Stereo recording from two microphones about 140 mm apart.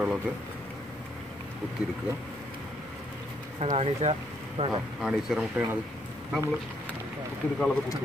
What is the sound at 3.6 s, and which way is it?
Speech, 50° right (ahead or behind).